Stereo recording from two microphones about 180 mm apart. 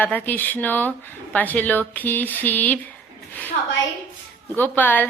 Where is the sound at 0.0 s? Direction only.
10° left (ahead or behind).